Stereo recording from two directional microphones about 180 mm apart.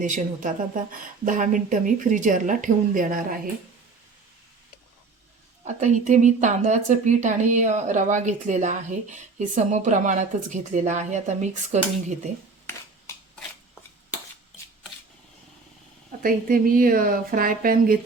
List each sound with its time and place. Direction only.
0.0 s speech: 45° right (ahead or behind)
5.6 s speech: 40° right (ahead or behind)
16.2 s speech: 50° right (ahead or behind)